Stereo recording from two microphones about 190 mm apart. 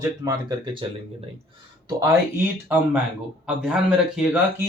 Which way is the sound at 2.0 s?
15° right (ahead or behind).